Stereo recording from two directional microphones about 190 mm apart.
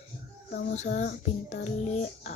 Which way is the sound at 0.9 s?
55° left (ahead or behind).